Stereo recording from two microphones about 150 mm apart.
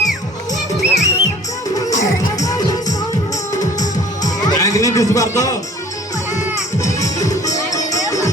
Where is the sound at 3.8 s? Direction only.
55° left (ahead or behind).